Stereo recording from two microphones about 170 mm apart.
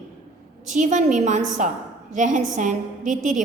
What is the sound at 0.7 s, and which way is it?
A woman's voice, 45° right (ahead or behind).